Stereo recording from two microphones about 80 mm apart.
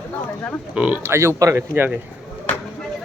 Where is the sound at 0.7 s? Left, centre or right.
Centre.